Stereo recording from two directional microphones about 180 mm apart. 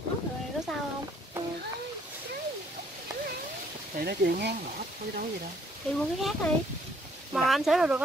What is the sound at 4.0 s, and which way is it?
Speech, 65° right (ahead or behind).